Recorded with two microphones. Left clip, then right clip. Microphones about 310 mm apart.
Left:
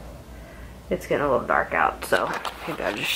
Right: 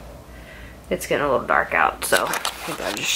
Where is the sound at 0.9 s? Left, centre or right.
Centre.